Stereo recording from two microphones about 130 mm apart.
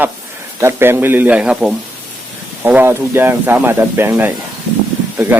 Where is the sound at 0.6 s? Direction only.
15° right (ahead or behind).